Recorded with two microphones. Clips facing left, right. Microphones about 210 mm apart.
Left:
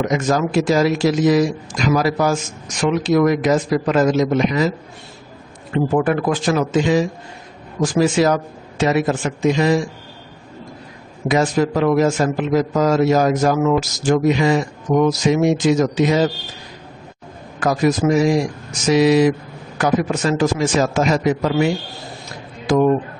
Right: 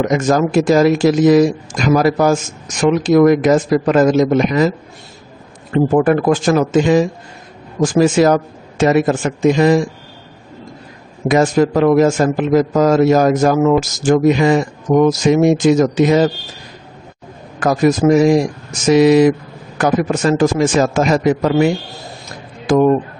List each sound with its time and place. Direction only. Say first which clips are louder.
0.1 s a man's voice: right 4 dB; 50° right (ahead or behind)
5.7 s a man's voice: right 5 dB; 45° right (ahead or behind)
11.2 s a man's voice: right 4 dB; 50° right (ahead or behind)
17.6 s a man's voice: right 4 dB; 45° right (ahead or behind)